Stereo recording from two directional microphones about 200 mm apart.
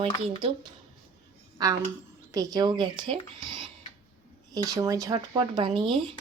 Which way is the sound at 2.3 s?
20° right (ahead or behind).